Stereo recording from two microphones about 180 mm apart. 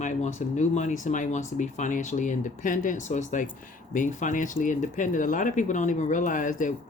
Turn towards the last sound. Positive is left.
turn(degrees=45)  # may be behind; listen again after turning